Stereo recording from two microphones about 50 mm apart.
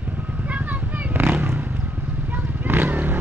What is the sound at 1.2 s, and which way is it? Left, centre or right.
Vehicle, right.